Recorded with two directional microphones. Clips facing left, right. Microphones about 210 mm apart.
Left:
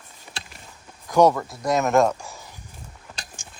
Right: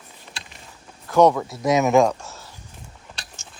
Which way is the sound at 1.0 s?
10° left (ahead or behind).